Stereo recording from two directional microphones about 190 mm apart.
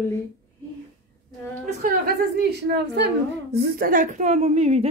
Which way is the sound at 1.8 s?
50° right (ahead or behind).